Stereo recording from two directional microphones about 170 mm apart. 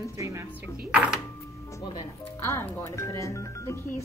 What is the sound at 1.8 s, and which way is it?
Speech, 25° left (ahead or behind).